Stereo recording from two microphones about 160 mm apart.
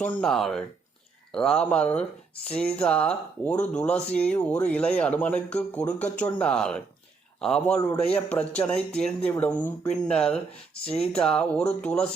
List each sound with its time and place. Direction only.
0.0 s speech: 5° left (ahead or behind)